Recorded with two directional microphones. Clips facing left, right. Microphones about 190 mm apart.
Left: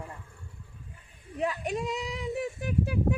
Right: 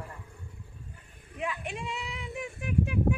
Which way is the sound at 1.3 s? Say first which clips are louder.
Left 5 dB; 40° left (ahead or behind).